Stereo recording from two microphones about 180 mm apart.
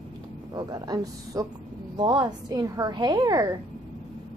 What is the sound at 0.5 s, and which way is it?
A woman's voice, 20° right (ahead or behind).